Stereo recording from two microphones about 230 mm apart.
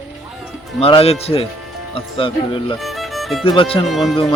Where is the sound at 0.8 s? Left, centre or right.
Left.